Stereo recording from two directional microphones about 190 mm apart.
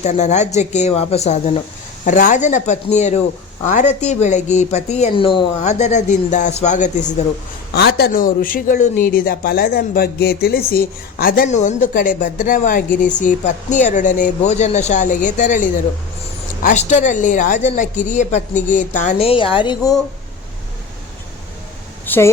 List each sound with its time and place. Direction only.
0.0 s a woman's voice: 35° left (ahead or behind)
7.7 s a woman's voice: 55° left (ahead or behind); by 19.9 s 25° left (ahead or behind)
22.0 s a sound: 10° left (ahead or behind)